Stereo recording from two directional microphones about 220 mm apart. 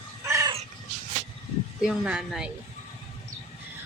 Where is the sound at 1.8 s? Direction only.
5° right (ahead or behind).